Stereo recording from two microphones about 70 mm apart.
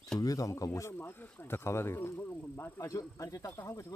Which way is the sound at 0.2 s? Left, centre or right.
Left.